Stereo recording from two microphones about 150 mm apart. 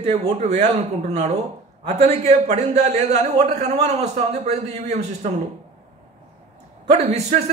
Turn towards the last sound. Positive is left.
turn(degrees=-50)  # may be behind; listen again after turning